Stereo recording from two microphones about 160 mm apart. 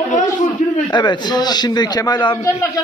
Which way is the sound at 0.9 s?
30° left (ahead or behind).